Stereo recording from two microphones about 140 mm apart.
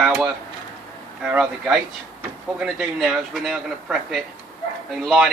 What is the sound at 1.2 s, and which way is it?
Speech, 5° right (ahead or behind).